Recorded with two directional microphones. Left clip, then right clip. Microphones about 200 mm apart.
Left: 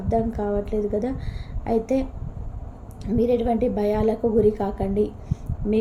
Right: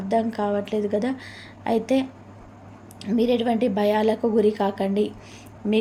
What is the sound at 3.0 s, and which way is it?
Speech, 15° right (ahead or behind).